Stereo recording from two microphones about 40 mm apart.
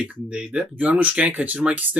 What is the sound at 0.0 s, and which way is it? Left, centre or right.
Speech, right.